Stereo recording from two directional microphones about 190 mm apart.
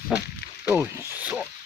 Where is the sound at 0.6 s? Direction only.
15° right (ahead or behind).